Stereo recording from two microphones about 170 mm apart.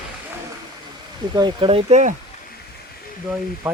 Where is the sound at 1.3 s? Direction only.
25° right (ahead or behind).